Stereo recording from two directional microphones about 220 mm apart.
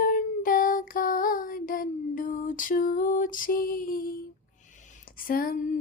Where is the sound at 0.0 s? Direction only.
40° left (ahead or behind).